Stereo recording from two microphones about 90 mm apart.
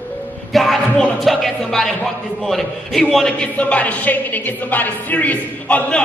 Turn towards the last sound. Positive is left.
turn(degrees=15)  # may be behind; listen again after turning